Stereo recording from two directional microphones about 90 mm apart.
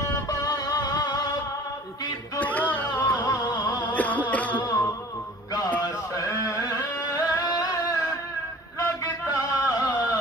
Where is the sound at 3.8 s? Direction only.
15° left (ahead or behind).